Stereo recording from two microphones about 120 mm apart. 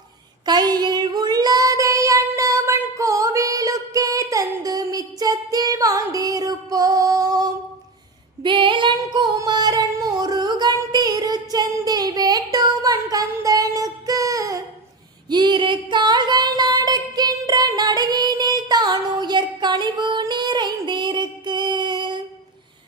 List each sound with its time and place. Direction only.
0.4 s child singing: 35° right (ahead or behind)
8.4 s female singing: 40° right (ahead or behind)
9.0 s singing: 35° right (ahead or behind)
15.3 s a sound: 40° right (ahead or behind)